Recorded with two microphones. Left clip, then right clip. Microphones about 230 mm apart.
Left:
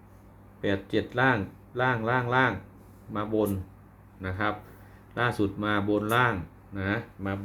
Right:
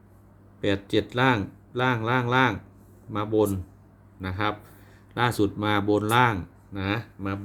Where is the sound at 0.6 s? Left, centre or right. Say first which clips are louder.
Right 3 dB; right.